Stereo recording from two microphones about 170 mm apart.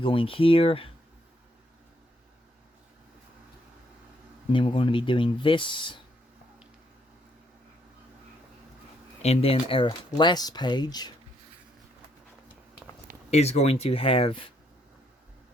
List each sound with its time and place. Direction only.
0.0 s speech: 30° left (ahead or behind)
4.5 s speech: 30° left (ahead or behind)
9.2 s speech: 35° left (ahead or behind)
13.3 s speech: 40° left (ahead or behind)